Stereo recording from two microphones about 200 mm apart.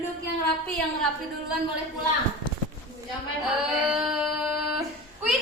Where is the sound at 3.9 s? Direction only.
5° right (ahead or behind).